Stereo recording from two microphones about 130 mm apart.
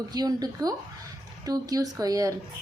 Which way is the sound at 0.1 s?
30° right (ahead or behind).